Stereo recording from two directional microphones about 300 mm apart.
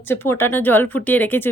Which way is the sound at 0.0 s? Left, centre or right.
Centre.